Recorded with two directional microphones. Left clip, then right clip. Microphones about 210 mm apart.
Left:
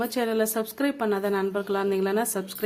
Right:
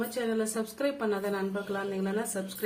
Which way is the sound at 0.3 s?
50° left (ahead or behind).